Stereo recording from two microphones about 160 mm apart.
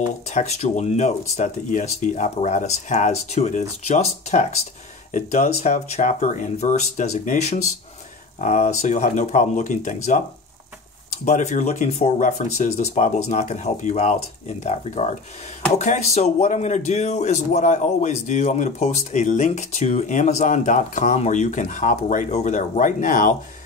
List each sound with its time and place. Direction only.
0.3 s speech: 45° left (ahead or behind)
11.2 s speech: 50° left (ahead or behind)